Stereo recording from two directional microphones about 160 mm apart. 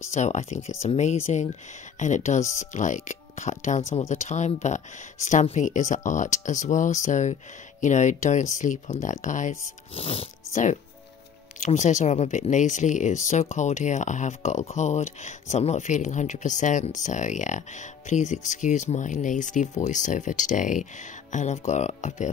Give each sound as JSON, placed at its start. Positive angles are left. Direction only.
{"t": 0.1, "sound": "speech", "side_deg": 45}